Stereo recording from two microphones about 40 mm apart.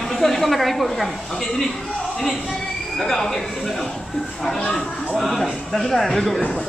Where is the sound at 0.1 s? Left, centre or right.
Centre.